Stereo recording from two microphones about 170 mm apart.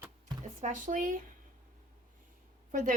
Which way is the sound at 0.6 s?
50° right (ahead or behind).